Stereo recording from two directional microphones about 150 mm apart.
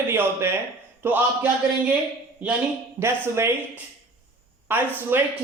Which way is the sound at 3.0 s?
15° right (ahead or behind).